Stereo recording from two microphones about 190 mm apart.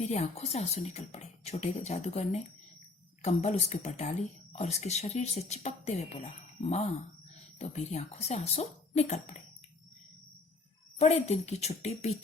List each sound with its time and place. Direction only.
0.0 s speech: 35° left (ahead or behind)
10.9 s speech: 35° left (ahead or behind)